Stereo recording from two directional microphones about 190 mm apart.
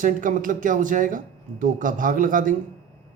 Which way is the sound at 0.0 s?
45° right (ahead or behind).